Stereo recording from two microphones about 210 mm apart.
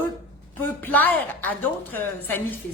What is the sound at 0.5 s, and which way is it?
Speech, 10° left (ahead or behind).